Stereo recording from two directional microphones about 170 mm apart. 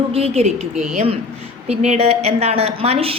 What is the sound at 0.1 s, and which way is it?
A woman's voice, 35° right (ahead or behind).